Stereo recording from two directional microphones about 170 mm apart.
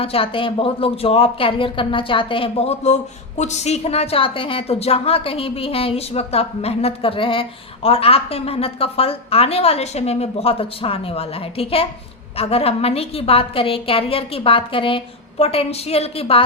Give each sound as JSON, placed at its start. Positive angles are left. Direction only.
{"t": 0.0, "sound": "speech", "side_deg": 35}